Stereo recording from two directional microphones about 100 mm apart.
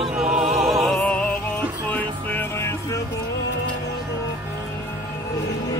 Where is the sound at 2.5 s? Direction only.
25° left (ahead or behind).